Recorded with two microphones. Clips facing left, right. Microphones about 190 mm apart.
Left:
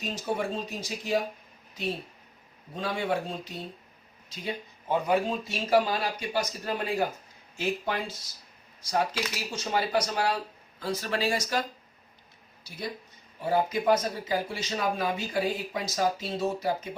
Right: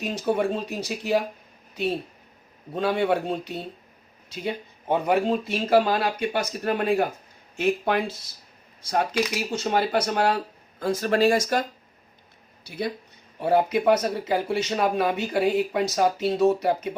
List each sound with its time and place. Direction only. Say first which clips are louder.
0.0 s speech: right 6 dB; 65° right (ahead or behind)
2.7 s speech: right 7 dB; 65° right (ahead or behind)
12.6 s speech: right 7 dB; 60° right (ahead or behind)